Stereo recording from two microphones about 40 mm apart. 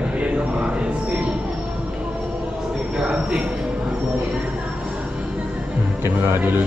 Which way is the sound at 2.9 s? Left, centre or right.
Centre.